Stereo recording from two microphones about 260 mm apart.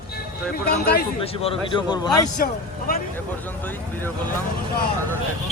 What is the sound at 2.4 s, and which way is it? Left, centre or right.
Speech, left.